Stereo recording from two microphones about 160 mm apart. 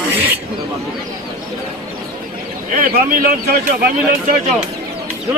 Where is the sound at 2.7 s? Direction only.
60° right (ahead or behind).